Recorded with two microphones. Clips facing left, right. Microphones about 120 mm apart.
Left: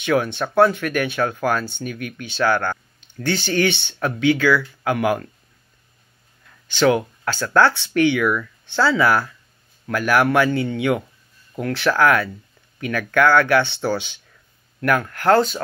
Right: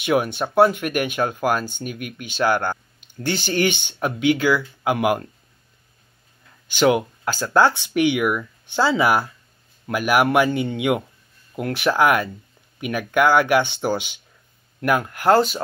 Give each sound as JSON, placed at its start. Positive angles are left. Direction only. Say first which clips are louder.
{"t": 0.0, "sound": "speech", "louder": "even", "side_deg": -15}
{"t": 6.7, "sound": "speech", "louder": "even", "side_deg": -15}